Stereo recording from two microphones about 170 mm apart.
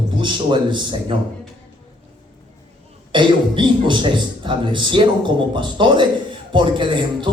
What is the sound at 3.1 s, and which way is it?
A man's voice, 30° right (ahead or behind).